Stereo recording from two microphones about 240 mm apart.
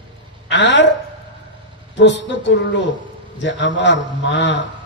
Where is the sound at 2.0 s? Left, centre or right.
Left.